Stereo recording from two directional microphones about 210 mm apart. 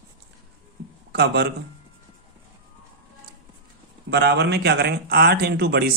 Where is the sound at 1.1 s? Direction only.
50° right (ahead or behind).